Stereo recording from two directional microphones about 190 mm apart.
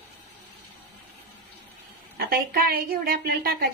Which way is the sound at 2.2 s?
55° right (ahead or behind).